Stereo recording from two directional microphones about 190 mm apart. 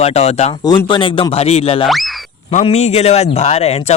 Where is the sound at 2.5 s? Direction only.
35° left (ahead or behind).